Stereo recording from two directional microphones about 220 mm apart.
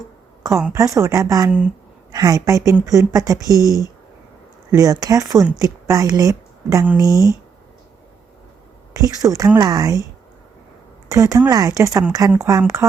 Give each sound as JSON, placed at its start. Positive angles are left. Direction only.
{"t": 0.4, "sound": "speech", "side_deg": -15}
{"t": 2.1, "sound": "speech", "side_deg": -15}
{"t": 4.7, "sound": "speech", "side_deg": -15}
{"t": 9.0, "sound": "speech", "side_deg": -15}
{"t": 11.1, "sound": "speech", "side_deg": -15}